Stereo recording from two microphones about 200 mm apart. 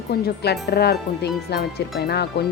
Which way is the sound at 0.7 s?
55° left (ahead or behind).